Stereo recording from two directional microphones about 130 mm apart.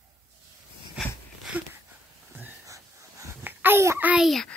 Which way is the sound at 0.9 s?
5° right (ahead or behind).